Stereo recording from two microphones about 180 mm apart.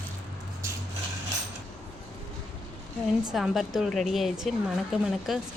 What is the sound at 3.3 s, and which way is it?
Speech, centre (ahead or behind).